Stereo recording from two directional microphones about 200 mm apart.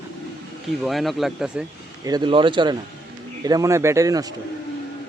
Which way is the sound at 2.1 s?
25° right (ahead or behind).